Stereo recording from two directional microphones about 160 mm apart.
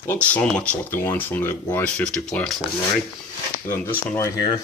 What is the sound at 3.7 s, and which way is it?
Speech, 15° left (ahead or behind).